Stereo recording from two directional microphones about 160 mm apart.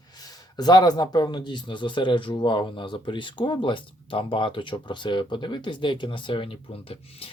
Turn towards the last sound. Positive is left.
turn(degrees=35)  # may be behind; listen again after turning